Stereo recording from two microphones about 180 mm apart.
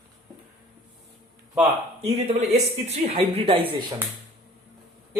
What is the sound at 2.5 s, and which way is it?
A woman's voice, 35° right (ahead or behind).